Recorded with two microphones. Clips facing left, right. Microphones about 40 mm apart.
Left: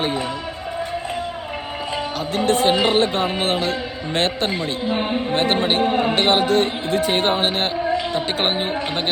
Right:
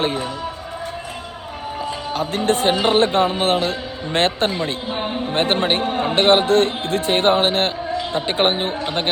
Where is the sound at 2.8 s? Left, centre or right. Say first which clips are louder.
Right 2 dB; right.